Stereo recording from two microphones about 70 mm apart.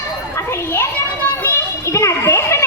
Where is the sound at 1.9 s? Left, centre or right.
Left.